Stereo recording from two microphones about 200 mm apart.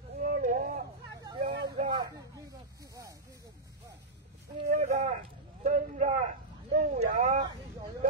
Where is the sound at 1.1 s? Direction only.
20° right (ahead or behind).